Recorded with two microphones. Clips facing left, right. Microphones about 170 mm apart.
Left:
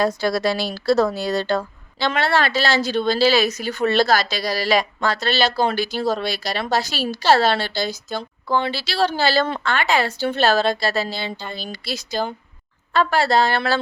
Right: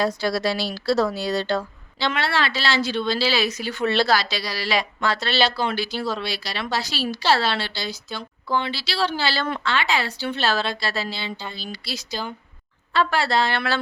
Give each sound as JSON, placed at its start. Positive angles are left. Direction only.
{"t": 0.0, "sound": "speech", "side_deg": 50}